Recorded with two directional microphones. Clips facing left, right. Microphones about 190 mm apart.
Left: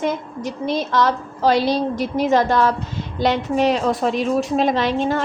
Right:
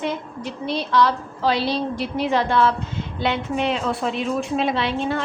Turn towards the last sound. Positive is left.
turn(degrees=40)  # may be behind; listen again after turning